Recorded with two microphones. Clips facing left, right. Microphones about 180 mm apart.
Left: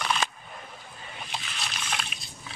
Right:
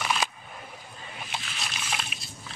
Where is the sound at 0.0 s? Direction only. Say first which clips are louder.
Even; 5° right (ahead or behind).